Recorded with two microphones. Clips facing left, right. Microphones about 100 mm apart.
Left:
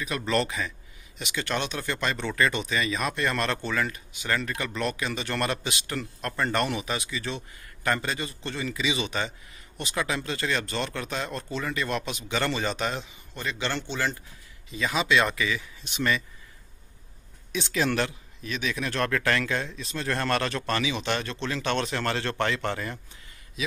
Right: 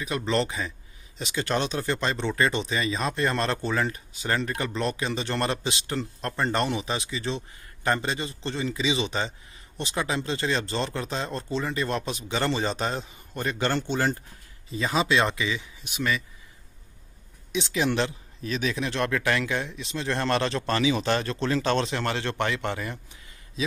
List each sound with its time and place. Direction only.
0.0 s speech: 25° right (ahead or behind)
15.8 s speech: 5° right (ahead or behind)
17.5 s speech: 20° right (ahead or behind); by 18.9 s 35° right (ahead or behind)
18.9 s speech: 20° right (ahead or behind)